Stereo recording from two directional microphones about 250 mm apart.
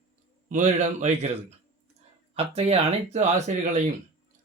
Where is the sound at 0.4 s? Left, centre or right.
Right.